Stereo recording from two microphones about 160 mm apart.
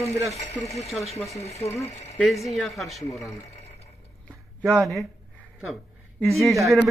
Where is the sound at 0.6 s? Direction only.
20° left (ahead or behind).